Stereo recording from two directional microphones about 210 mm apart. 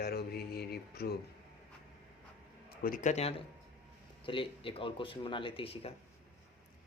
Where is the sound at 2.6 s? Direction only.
40° left (ahead or behind); by 5.9 s 25° left (ahead or behind).